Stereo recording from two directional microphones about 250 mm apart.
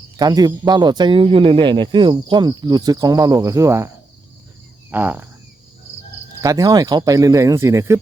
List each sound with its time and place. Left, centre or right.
0.2 s speech: centre
6.4 s speech: centre